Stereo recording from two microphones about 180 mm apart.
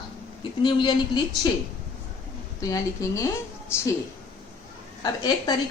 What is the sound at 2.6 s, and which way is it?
Speech, 20° left (ahead or behind).